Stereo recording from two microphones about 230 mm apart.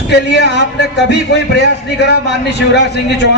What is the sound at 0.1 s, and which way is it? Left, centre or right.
A man's voice, left.